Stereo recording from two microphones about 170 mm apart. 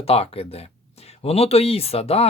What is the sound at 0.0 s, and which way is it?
Speech, 35° left (ahead or behind).